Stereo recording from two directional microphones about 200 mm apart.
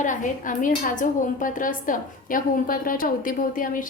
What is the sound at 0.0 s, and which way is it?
A woman's voice, 40° left (ahead or behind).